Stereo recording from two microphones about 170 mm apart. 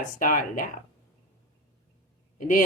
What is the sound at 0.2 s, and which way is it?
Speech, 55° left (ahead or behind).